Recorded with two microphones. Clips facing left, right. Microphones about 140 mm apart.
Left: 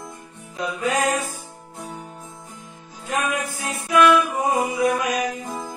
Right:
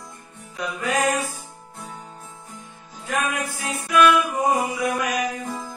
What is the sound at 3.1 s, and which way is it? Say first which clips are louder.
Music: left 1 dB; 25° left (ahead or behind).